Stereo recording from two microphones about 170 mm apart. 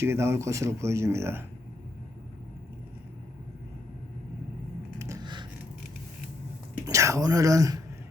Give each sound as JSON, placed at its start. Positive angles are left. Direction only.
{"t": 0.0, "sound": "speech", "side_deg": -15}
{"t": 4.9, "sound": "a sound", "side_deg": -20}
{"t": 6.8, "sound": "speech", "side_deg": -20}